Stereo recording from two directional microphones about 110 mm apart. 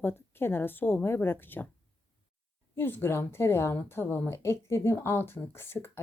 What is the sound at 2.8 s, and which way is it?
A woman's voice, 20° left (ahead or behind).